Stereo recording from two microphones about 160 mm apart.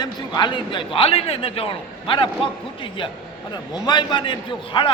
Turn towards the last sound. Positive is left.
turn(degrees=30)  # may be behind; listen again after turning